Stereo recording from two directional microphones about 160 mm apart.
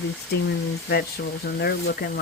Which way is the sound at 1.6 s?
80° left.